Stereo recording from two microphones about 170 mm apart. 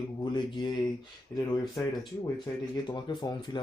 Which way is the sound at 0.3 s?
25° left (ahead or behind).